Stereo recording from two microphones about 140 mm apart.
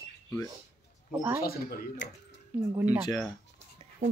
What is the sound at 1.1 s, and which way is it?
Speech, 15° right (ahead or behind).